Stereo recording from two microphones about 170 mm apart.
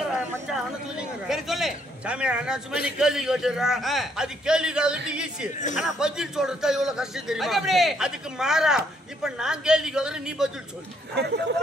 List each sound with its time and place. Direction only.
0.0 s a man's voice: 5° right (ahead or behind)
11.1 s speech: 75° right (ahead or behind)